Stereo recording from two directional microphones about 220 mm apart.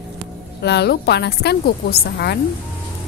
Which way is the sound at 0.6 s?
50° left (ahead or behind).